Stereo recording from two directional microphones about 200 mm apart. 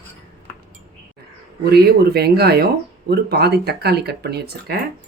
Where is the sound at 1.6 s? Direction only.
50° right (ahead or behind).